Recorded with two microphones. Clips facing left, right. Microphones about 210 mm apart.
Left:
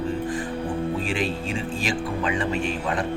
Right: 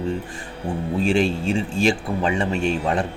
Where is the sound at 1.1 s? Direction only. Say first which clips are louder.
Right 6 dB; 25° right (ahead or behind).